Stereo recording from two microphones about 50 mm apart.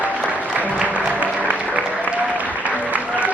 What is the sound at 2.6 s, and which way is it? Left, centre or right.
Applause, right.